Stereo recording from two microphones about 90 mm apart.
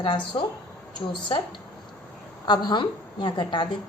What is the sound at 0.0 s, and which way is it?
A woman's voice, 65° left (ahead or behind).